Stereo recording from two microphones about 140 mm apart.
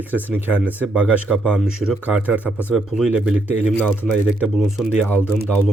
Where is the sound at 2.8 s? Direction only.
Centre (ahead or behind).